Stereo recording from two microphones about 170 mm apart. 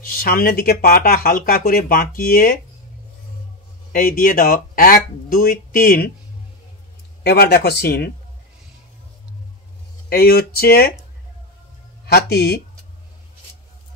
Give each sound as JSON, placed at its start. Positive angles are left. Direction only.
{"t": 0.0, "sound": "speech", "side_deg": 60}
{"t": 3.9, "sound": "speech", "side_deg": 55}
{"t": 7.2, "sound": "speech", "side_deg": 70}
{"t": 10.0, "sound": "speech", "side_deg": 65}
{"t": 12.1, "sound": "speech", "side_deg": 70}